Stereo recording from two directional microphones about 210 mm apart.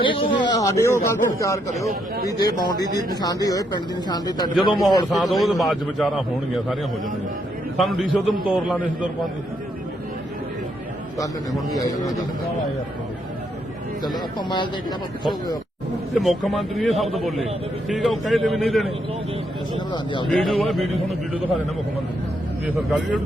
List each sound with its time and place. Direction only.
0.0 s a man's voice: 25° left (ahead or behind)
4.8 s a man's voice: centre (ahead or behind)
7.8 s a man's voice: centre (ahead or behind)
14.0 s speech: 20° left (ahead or behind)
16.1 s a man's voice: centre (ahead or behind)
20.3 s a man's voice: centre (ahead or behind)
22.9 s a man's voice: centre (ahead or behind)